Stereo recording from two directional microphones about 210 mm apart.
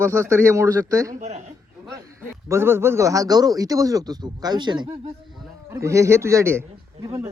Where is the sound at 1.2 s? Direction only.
35° right (ahead or behind).